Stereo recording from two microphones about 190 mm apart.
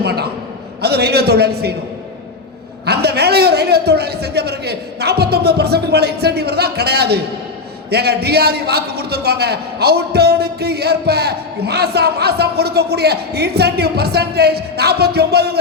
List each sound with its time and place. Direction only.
0.0 s a sound: 60° right (ahead or behind)
0.8 s a man's voice: 60° right (ahead or behind)
2.8 s a man's voice: 60° right (ahead or behind)